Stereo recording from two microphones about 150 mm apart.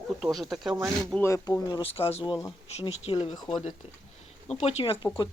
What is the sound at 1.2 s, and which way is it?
Speech, 15° left (ahead or behind).